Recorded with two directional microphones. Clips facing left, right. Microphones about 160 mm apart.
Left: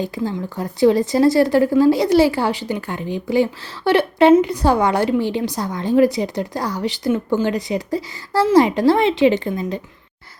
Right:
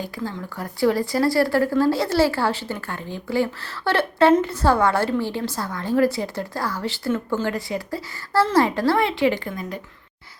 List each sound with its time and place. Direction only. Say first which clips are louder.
0.0 s speech: left 6 dB; 20° left (ahead or behind)